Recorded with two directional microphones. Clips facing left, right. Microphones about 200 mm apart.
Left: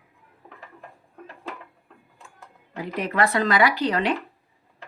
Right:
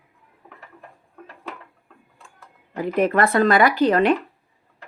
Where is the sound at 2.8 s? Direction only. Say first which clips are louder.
Right 5 dB; 50° right (ahead or behind).